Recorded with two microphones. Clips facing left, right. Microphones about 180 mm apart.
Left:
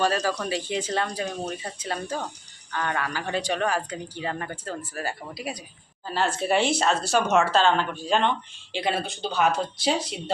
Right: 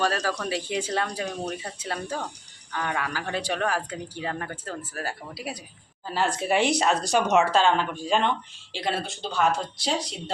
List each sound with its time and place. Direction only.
0.0 s speech: centre (ahead or behind)
2.7 s speech: 10° right (ahead or behind)